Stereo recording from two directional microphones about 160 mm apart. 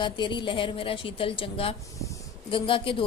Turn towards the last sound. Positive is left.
turn(degrees=35)  # may be behind; listen again after turning